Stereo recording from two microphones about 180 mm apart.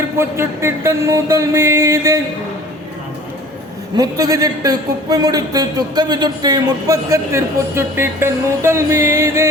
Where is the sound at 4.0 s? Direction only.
20° right (ahead or behind).